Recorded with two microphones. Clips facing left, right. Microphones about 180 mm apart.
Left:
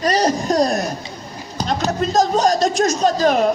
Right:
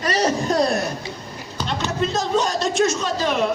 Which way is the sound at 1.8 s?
40° left (ahead or behind).